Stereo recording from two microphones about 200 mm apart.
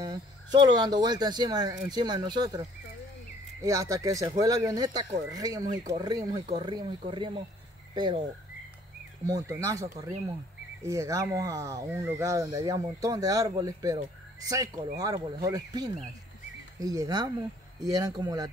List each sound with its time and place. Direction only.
0.0 s speech: 20° right (ahead or behind)
3.6 s speech: 15° right (ahead or behind)